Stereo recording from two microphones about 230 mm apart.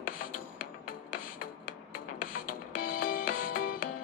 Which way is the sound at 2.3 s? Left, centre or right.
Left.